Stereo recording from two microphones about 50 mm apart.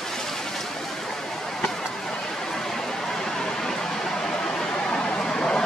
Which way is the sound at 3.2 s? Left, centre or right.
Centre.